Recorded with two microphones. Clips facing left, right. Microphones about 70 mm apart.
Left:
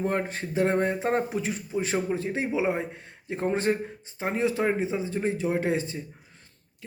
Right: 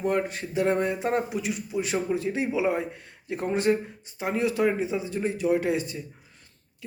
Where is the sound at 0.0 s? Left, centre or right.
Left.